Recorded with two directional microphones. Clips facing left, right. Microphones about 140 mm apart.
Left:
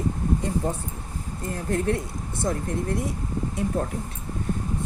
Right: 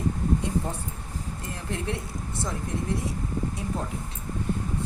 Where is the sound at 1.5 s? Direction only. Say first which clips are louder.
Left 8 dB; 45° left (ahead or behind).